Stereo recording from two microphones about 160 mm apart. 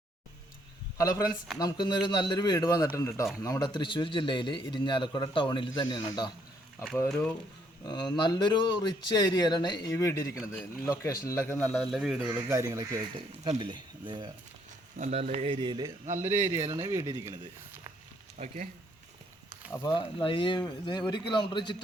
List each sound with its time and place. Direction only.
0.9 s a man's voice: 20° left (ahead or behind)
7.9 s a man's voice: 25° left (ahead or behind); by 12.4 s 5° right (ahead or behind)
12.5 s speech: 20° right (ahead or behind)
13.6 s speech: 30° right (ahead or behind)
14.9 s speech: 45° right (ahead or behind)
16.0 s speech: 50° right (ahead or behind)
16.7 s speech: 20° right (ahead or behind)
18.3 s speech: 45° right (ahead or behind)
19.7 s a man's voice: 25° left (ahead or behind)